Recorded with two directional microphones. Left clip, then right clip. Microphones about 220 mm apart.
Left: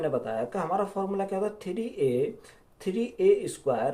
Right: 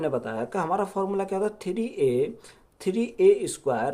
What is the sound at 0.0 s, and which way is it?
Speech, 45° right (ahead or behind).